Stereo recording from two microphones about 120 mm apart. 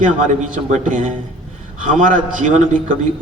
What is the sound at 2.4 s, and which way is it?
Speech, 90° right.